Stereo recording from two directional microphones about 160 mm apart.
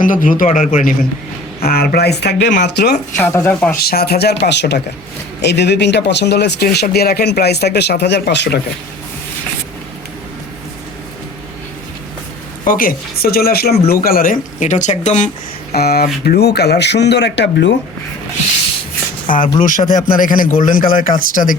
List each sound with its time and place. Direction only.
0.0 s speech: 55° left (ahead or behind)
1.6 s speech: 70° left (ahead or behind); by 3.0 s 90° left
3.2 s speech: 15° left (ahead or behind)
3.8 s speech: 75° left (ahead or behind)
12.6 s speech: 60° left (ahead or behind)
15.7 s speech: 75° left (ahead or behind); by 17.7 s 90° left
19.3 s speech: 55° left (ahead or behind)